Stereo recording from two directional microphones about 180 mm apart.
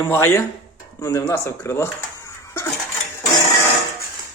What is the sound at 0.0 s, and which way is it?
Speech, 10° left (ahead or behind).